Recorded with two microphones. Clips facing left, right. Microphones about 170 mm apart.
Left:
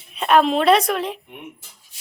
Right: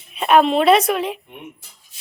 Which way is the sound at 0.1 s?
5° right (ahead or behind).